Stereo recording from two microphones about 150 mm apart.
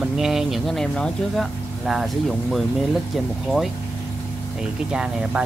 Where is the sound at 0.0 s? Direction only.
5° right (ahead or behind).